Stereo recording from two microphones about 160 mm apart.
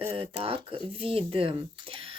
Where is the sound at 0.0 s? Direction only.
35° right (ahead or behind).